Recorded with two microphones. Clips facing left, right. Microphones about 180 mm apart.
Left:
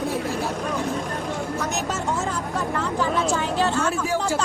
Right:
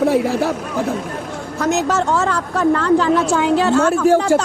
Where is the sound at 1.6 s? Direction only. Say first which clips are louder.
Right 9 dB; 75° right (ahead or behind).